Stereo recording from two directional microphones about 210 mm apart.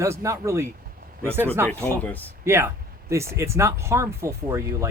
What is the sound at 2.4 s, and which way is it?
Speech, 10° right (ahead or behind).